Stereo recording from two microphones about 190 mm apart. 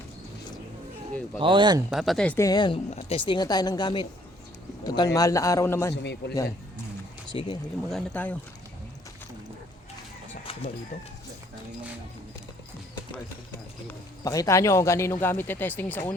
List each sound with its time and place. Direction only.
1.4 s speech: 25° right (ahead or behind)
1.9 s speech: centre (ahead or behind)
2.5 s speech: 25° left (ahead or behind)
5.9 s speech: 65° left (ahead or behind)
7.3 s speech: 25° left (ahead or behind)
7.9 s speech: 5° left (ahead or behind)
10.4 s a sound: 30° left (ahead or behind)
13.8 s speech: 15° left (ahead or behind)